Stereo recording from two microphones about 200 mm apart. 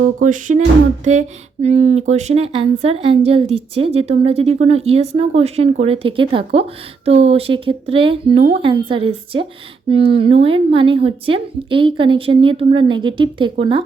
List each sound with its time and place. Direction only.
0.2 s music: 40° right (ahead or behind)
1.6 s a woman's voice: 35° right (ahead or behind)